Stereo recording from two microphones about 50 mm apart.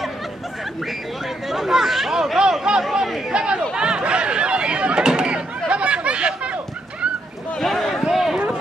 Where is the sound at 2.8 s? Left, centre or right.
Centre.